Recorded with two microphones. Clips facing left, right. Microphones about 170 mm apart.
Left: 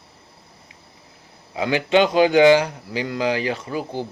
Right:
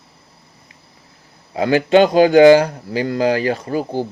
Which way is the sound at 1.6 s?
45° right (ahead or behind).